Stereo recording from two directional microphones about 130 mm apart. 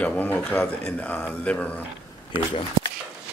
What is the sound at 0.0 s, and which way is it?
A man's voice, 10° left (ahead or behind).